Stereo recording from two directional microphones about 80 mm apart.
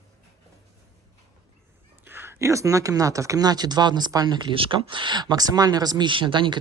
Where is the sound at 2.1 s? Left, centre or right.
Right.